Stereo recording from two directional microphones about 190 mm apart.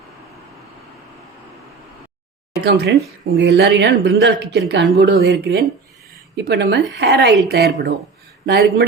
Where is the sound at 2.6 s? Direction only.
60° right (ahead or behind).